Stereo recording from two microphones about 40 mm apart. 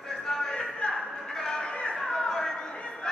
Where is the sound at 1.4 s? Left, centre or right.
Centre.